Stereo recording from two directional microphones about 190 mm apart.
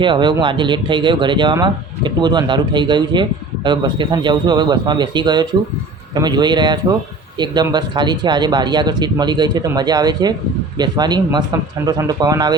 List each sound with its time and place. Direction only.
0.0 s speech: 25° right (ahead or behind)